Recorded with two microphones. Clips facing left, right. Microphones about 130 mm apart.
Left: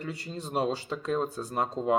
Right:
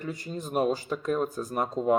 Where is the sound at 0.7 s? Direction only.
30° left (ahead or behind).